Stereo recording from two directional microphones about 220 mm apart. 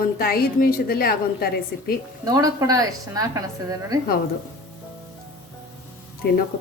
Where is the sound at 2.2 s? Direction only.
15° right (ahead or behind).